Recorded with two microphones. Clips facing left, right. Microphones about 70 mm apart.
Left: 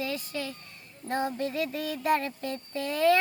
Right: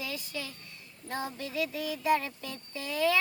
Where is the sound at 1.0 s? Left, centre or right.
Left.